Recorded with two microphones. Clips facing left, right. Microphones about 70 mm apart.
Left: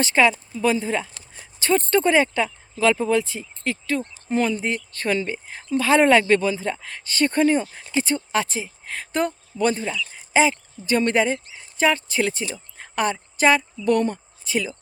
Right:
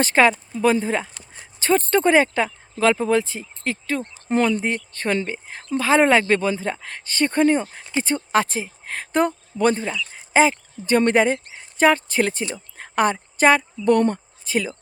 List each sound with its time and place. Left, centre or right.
0.0 s speech: right
4.0 s a woman's voice: right